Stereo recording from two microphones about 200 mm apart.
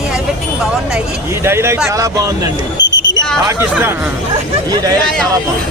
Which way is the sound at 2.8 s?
65° left (ahead or behind).